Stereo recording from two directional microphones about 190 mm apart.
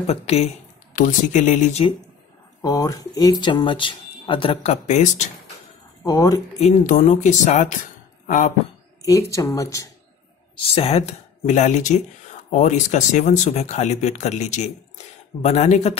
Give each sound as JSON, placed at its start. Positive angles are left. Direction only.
{"t": 0.0, "sound": "speech", "side_deg": 35}
{"t": 2.6, "sound": "speech", "side_deg": 20}
{"t": 4.8, "sound": "speech", "side_deg": 40}
{"t": 6.0, "sound": "speech", "side_deg": 20}
{"t": 6.6, "sound": "speech", "side_deg": 40}
{"t": 9.3, "sound": "speech", "side_deg": 15}
{"t": 10.5, "sound": "speech", "side_deg": 30}